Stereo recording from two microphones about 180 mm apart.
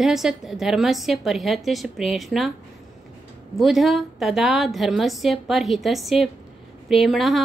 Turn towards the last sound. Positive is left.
turn(degrees=0)  # may be behind; listen again after turning